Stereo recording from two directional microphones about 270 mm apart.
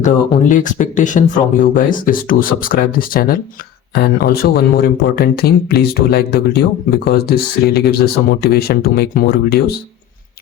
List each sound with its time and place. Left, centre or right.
0.0 s speech: left